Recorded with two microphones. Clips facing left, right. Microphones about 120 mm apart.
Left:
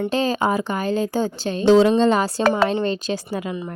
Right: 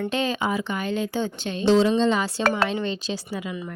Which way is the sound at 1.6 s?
55° left (ahead or behind).